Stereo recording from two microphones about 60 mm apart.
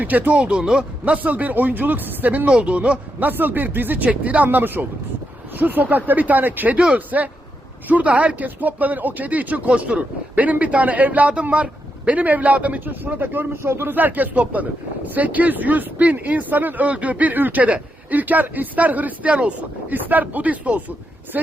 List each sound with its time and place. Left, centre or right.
0.0 s speech: right
3.2 s speech: right